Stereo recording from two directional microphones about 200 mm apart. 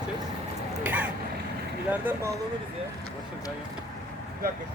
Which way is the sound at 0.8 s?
10° right (ahead or behind).